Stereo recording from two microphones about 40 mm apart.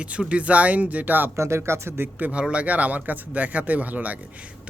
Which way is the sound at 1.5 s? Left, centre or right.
Right.